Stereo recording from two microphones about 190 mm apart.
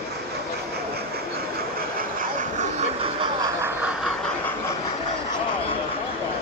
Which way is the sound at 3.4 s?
10° right (ahead or behind).